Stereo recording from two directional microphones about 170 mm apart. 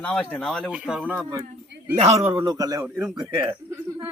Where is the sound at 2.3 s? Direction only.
25° right (ahead or behind).